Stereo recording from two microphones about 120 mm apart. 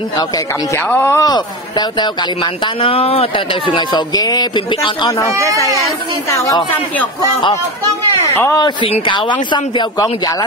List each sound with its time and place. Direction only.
0.8 s speech: 20° left (ahead or behind); by 5.1 s 40° left (ahead or behind)
5.3 s speech: 25° right (ahead or behind)
6.3 s a woman's voice: 25° left (ahead or behind)
8.5 s speech: 40° left (ahead or behind)